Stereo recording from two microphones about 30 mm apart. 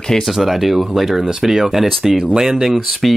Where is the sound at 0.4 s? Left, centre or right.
Centre.